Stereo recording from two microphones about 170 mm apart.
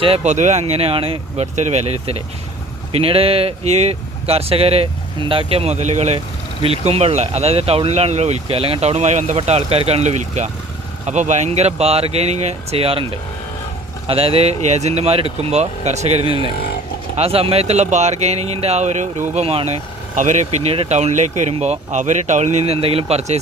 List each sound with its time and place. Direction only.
0.0 s speech: 40° right (ahead or behind)
14.1 s speech: 35° right (ahead or behind)